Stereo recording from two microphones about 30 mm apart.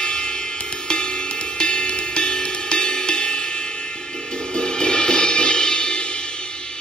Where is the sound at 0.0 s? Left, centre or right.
Left.